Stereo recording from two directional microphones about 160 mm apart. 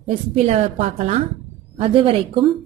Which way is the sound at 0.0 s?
40° right (ahead or behind).